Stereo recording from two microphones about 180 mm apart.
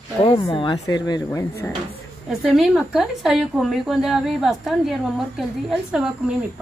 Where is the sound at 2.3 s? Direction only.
Centre (ahead or behind).